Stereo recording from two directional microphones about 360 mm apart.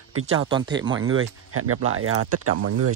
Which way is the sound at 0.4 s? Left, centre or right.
Centre.